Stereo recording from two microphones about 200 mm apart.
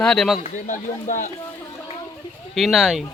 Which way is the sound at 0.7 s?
40° left (ahead or behind).